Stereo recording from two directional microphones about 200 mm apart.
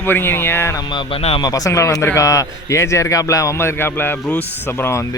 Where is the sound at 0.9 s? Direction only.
30° left (ahead or behind).